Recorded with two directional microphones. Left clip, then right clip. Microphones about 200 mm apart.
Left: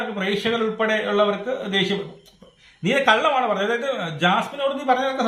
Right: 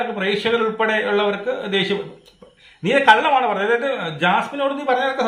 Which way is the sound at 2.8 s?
5° right (ahead or behind).